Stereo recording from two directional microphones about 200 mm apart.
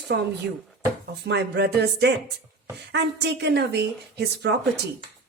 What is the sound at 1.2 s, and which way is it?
Speech, 60° right (ahead or behind).